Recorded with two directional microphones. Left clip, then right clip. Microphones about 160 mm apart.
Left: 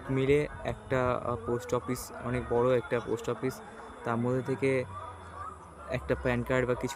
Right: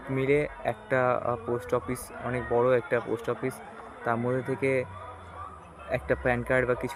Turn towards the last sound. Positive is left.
turn(degrees=20)  # may be behind; listen again after turning